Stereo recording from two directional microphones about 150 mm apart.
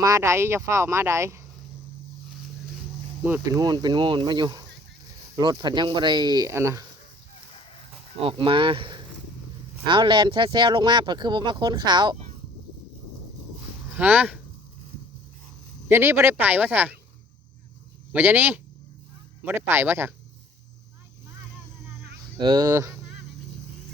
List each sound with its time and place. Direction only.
0.0 s speech: 20° right (ahead or behind)
3.2 s speech: 15° right (ahead or behind)
8.2 s speech: 35° right (ahead or behind)
13.9 s speech: 10° right (ahead or behind)
15.9 s speech: 15° right (ahead or behind)
18.1 s speech: 10° right (ahead or behind)
22.4 s speech: 30° right (ahead or behind)